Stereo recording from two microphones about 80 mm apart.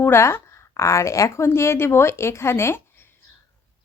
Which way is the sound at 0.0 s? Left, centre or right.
Left.